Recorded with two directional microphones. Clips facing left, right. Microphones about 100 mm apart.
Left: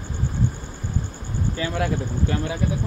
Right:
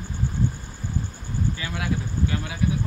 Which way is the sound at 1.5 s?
40° left (ahead or behind).